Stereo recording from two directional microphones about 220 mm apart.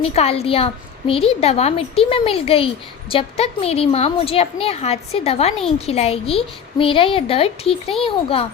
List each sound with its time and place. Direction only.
0.0 s a woman's voice: 30° left (ahead or behind)